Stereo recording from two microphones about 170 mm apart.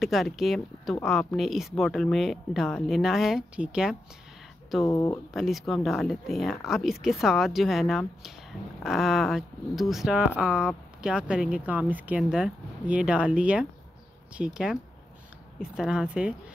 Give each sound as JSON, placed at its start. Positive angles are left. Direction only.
{"t": 0.0, "sound": "speech", "side_deg": 0}
{"t": 4.8, "sound": "speech", "side_deg": 15}
{"t": 5.3, "sound": "speech", "side_deg": 0}